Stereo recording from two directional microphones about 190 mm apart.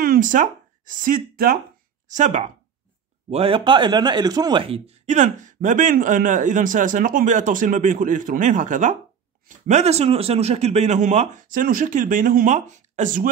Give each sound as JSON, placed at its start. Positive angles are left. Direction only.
{"t": 0.0, "sound": "speech", "side_deg": -50}
{"t": 3.3, "sound": "speech", "side_deg": -30}